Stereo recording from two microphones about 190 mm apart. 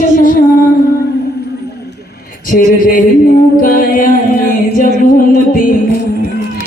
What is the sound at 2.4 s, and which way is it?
A man's voice, 45° left (ahead or behind).